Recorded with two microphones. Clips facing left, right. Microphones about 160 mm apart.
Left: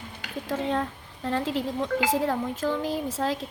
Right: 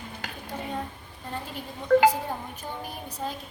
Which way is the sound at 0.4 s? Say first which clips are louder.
Left 7 dB; 90° left.